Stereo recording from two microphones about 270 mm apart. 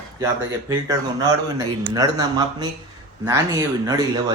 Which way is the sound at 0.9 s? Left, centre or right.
Centre.